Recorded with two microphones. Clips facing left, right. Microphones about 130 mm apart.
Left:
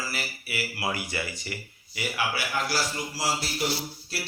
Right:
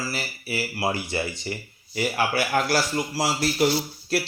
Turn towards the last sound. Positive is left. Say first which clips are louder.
# right 9 dB
turn(degrees=-55)  # may be behind; listen again after turning